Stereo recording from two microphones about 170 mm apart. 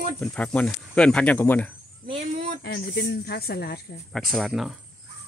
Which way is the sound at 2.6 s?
70° left (ahead or behind).